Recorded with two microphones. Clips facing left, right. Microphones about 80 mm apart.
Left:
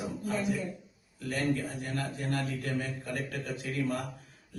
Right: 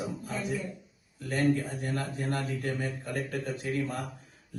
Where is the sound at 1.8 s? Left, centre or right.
Right.